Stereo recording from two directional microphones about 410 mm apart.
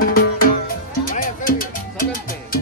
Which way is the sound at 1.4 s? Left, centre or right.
Left.